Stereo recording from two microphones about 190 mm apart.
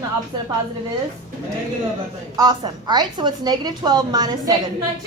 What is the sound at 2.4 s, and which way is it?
A woman's voice, 20° right (ahead or behind).